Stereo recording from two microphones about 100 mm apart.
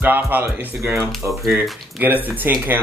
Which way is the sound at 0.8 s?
30° right (ahead or behind).